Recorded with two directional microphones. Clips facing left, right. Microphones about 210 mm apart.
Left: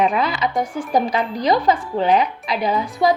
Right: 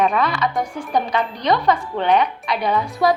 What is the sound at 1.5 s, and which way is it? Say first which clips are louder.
Speech: even; 30° left (ahead or behind).